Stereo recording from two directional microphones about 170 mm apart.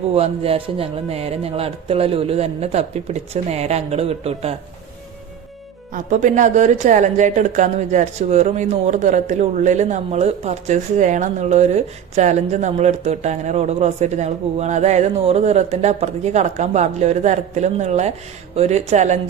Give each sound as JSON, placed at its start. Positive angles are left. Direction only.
{"t": 0.1, "sound": "speech", "side_deg": -35}
{"t": 5.9, "sound": "a woman's voice", "side_deg": -45}